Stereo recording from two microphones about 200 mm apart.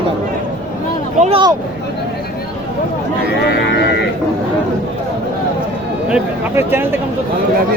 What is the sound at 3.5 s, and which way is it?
Speech, 55° left (ahead or behind).